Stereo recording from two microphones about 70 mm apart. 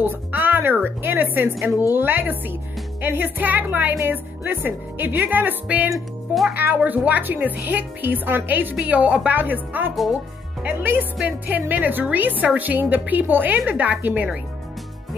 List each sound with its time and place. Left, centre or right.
0.0 s music: right
0.8 s a woman's voice: right
5.9 s speech: centre
6.5 s a woman's voice: right